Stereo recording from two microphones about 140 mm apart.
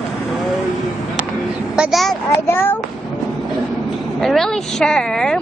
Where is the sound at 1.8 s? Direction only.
Centre (ahead or behind).